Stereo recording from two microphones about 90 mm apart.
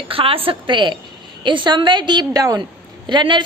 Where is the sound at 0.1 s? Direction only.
90° right; by 2.2 s 60° right (ahead or behind).